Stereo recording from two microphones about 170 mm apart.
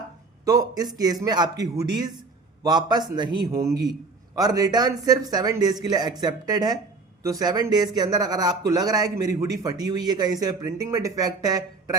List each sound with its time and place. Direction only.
0.4 s speech: 20° right (ahead or behind)